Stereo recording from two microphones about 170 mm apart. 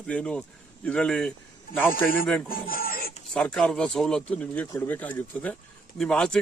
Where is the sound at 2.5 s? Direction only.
60° left (ahead or behind).